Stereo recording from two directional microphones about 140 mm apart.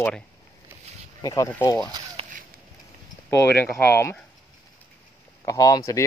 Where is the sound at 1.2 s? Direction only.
25° left (ahead or behind).